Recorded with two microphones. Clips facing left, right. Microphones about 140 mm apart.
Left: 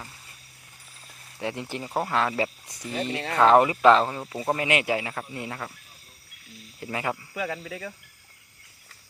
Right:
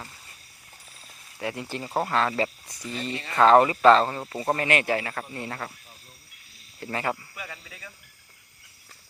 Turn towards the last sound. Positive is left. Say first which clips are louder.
# left 11 dB
turn(degrees=90)